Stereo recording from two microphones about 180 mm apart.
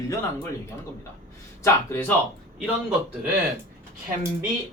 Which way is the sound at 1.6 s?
15° left (ahead or behind).